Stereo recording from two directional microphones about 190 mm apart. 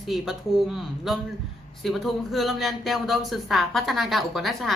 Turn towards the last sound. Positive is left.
turn(degrees=0)  # may be behind; listen again after turning